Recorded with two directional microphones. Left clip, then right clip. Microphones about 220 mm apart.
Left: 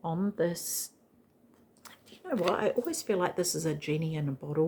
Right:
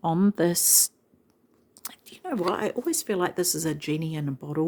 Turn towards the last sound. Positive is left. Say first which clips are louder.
# right 2 dB
turn(degrees=-45)  # may be behind; listen again after turning